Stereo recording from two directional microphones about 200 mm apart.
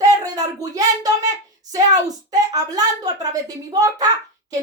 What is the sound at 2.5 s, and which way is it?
Speech, 20° right (ahead or behind).